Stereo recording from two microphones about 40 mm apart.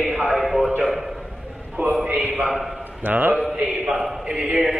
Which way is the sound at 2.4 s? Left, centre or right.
Centre.